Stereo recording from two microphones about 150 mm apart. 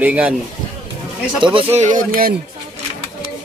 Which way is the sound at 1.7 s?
60° right (ahead or behind).